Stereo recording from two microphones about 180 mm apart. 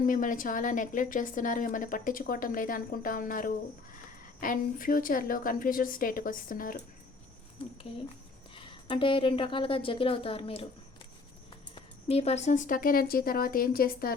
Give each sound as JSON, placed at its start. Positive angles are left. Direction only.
{"t": 0.0, "sound": "a woman's voice", "side_deg": 50}
{"t": 8.6, "sound": "a woman's voice", "side_deg": 30}
{"t": 11.7, "sound": "a woman's voice", "side_deg": 35}